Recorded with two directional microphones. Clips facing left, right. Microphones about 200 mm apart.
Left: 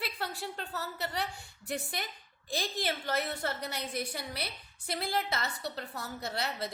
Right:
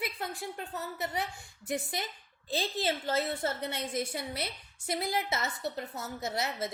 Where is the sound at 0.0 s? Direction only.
20° right (ahead or behind).